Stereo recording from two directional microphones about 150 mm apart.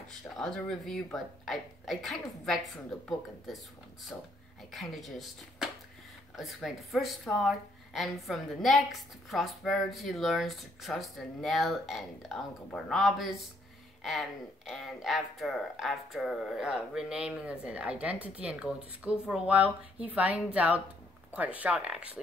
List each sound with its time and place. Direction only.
0.4 s a woman's voice: 5° left (ahead or behind)
4.1 s a woman's voice: 10° left (ahead or behind)
14.7 s a woman's voice: centre (ahead or behind)